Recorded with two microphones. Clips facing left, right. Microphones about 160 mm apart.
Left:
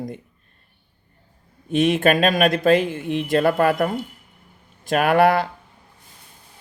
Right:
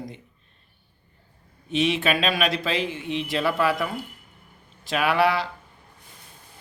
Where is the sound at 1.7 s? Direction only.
50° left (ahead or behind).